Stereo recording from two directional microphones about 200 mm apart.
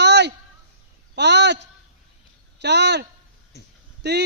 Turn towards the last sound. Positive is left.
turn(degrees=-55)  # may be behind; listen again after turning